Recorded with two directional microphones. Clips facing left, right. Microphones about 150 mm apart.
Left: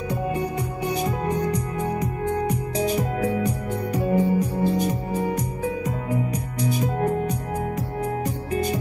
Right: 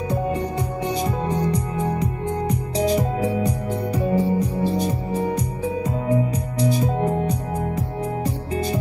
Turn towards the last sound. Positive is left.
turn(degrees=-30)  # may be behind; listen again after turning